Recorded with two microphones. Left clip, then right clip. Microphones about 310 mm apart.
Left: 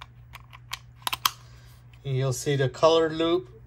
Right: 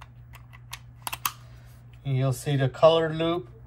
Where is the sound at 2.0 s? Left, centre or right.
Left.